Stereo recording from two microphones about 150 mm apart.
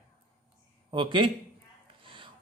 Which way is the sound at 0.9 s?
35° right (ahead or behind).